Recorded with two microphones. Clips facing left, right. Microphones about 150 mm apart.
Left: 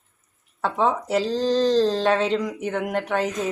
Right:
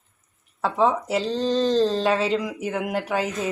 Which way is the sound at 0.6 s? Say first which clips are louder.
Right 1 dB; centre (ahead or behind).